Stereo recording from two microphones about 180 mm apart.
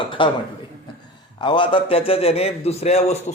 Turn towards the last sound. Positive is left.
turn(degrees=35)  # may be behind; listen again after turning